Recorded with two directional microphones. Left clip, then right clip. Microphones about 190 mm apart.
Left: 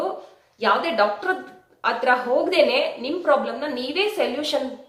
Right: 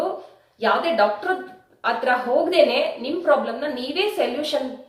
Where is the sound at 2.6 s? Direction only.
30° left (ahead or behind).